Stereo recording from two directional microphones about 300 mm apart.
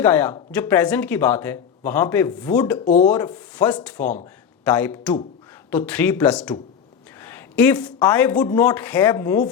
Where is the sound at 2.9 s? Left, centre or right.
Left.